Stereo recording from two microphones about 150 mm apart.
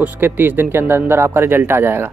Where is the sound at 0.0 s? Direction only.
15° right (ahead or behind).